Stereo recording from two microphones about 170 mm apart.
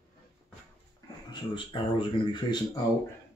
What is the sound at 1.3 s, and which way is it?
Speech, 30° left (ahead or behind).